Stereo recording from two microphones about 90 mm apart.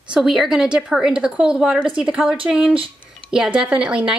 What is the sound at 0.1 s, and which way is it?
A woman's voice, 5° right (ahead or behind).